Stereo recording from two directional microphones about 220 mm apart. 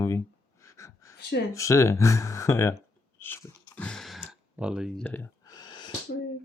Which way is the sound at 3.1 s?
10° left (ahead or behind).